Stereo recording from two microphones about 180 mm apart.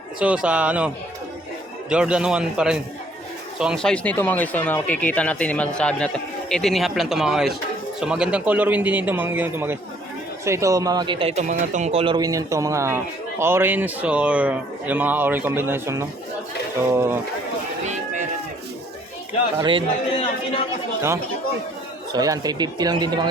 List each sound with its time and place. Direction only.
0.2 s speech: 5° right (ahead or behind)
1.9 s speech: 5° right (ahead or behind)
17.8 s run: 40° right (ahead or behind)
19.5 s speech: 25° right (ahead or behind)
22.1 s speech: 20° right (ahead or behind)